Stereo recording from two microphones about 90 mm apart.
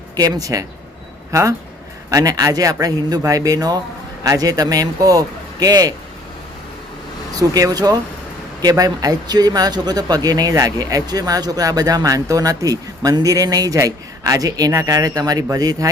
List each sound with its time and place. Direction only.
0.2 s a man's voice: 45° right (ahead or behind)
7.3 s speech: 45° right (ahead or behind)